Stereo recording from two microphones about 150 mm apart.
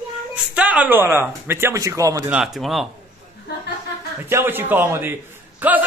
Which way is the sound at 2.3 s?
Centre (ahead or behind).